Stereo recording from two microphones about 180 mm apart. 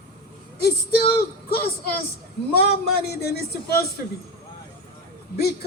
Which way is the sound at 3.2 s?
60° left (ahead or behind).